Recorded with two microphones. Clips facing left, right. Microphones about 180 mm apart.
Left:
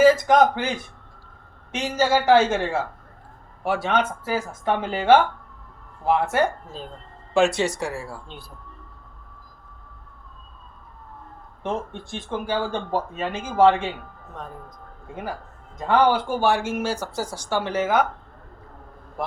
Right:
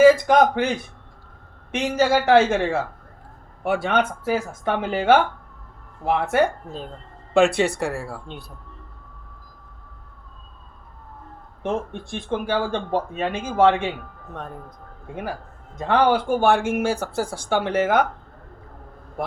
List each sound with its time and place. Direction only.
0.0 s speech: 60° right (ahead or behind)
1.7 s speech: 60° right (ahead or behind)
12.3 s speech: 60° right (ahead or behind)
15.1 s speech: 60° right (ahead or behind)